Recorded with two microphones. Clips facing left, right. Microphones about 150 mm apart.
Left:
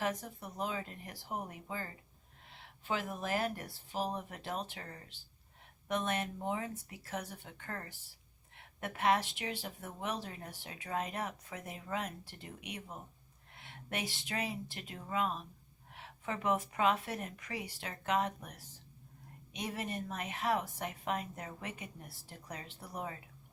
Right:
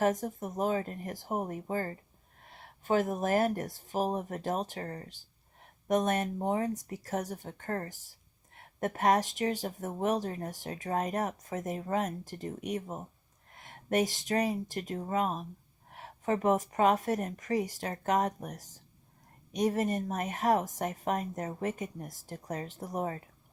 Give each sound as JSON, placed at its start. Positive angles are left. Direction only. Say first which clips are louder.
{"t": 0.0, "sound": "speech", "louder": "right 8 dB", "side_deg": -45}